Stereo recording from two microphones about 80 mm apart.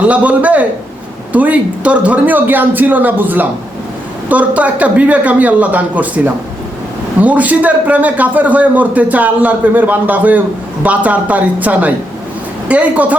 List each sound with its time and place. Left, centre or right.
0.0 s a man's voice: centre